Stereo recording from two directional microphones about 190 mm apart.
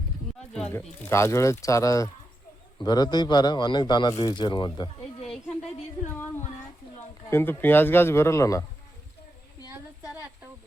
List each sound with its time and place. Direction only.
0.5 s speech: 5° left (ahead or behind); by 5.3 s 25° left (ahead or behind)
7.3 s speech: 15° left (ahead or behind)